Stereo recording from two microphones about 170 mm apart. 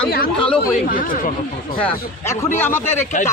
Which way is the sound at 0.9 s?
55° left (ahead or behind).